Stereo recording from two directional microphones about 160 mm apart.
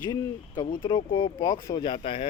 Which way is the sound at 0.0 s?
25° left (ahead or behind).